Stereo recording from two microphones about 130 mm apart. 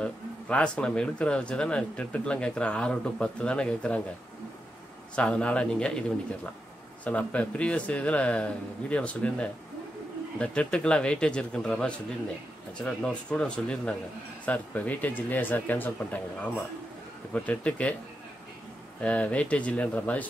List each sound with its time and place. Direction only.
0.0 s speech: 10° left (ahead or behind)
5.1 s speech: 10° left (ahead or behind)
18.9 s speech: 10° left (ahead or behind)